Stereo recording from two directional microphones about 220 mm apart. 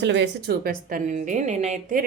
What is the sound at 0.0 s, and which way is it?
A woman's voice, 55° right (ahead or behind).